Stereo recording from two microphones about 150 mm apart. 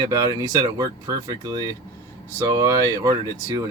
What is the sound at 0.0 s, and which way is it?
Speech, 25° right (ahead or behind).